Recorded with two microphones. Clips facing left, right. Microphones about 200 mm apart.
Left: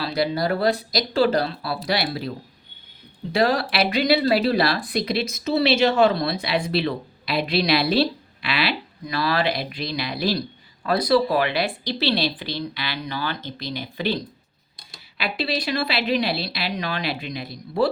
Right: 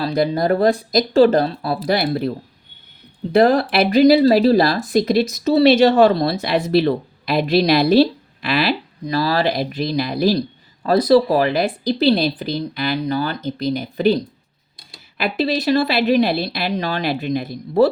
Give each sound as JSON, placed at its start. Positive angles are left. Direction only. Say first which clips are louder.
{"t": 0.0, "sound": "speech", "louder": "right 5 dB", "side_deg": -45}
{"t": 3.4, "sound": "speech", "louder": "right 4 dB", "side_deg": -50}
{"t": 3.8, "sound": "speech", "louder": "right 9 dB", "side_deg": -40}
{"t": 15.2, "sound": "speech", "louder": "right 6 dB", "side_deg": -45}